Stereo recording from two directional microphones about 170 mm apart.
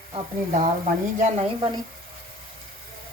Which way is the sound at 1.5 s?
30° right (ahead or behind).